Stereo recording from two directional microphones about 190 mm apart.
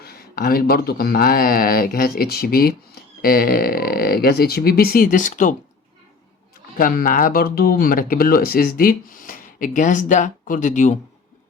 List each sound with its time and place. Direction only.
0.0 s speech: 55° left (ahead or behind)
6.7 s speech: 45° left (ahead or behind)